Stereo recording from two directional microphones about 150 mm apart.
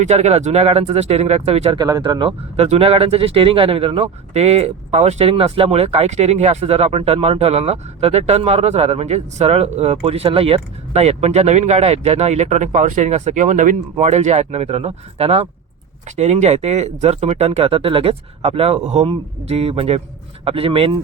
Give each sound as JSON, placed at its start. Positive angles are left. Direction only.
{"t": 0.0, "sound": "speech", "side_deg": -45}
{"t": 1.8, "sound": "speech", "side_deg": -30}